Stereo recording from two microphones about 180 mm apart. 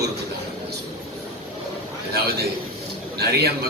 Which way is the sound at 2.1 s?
60° right (ahead or behind).